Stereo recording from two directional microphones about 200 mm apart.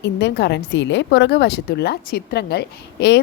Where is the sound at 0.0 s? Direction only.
55° left (ahead or behind).